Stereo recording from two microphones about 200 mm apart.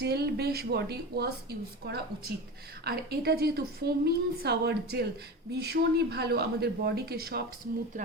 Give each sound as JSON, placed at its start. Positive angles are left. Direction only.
{"t": 0.0, "sound": "a woman's voice", "side_deg": -55}